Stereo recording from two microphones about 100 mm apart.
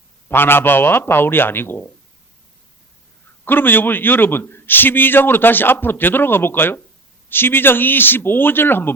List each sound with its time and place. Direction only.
0.3 s a man's voice: 20° left (ahead or behind)
3.4 s a man's voice: 20° left (ahead or behind)